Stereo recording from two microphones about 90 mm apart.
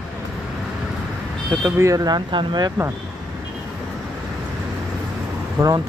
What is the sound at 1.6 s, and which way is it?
Speech, 35° right (ahead or behind).